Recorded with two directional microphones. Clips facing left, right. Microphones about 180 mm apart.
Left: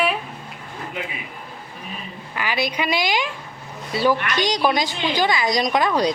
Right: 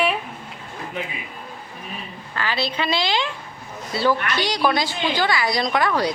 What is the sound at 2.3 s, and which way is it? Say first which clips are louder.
A woman's voice: left 1 dB; 15° left (ahead or behind).